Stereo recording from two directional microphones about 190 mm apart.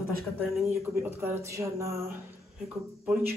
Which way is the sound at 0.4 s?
10° right (ahead or behind).